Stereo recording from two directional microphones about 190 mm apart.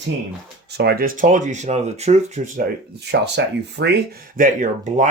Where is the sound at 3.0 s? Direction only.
60° right (ahead or behind).